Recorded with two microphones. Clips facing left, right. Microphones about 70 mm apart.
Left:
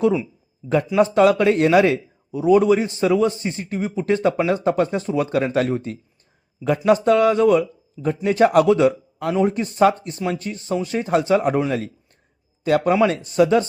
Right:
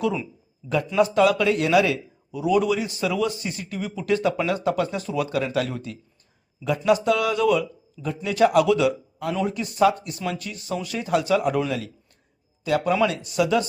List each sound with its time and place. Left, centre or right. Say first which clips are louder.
0.6 s speech: left 5 dB; centre
0.9 s a man's voice: left 3 dB; left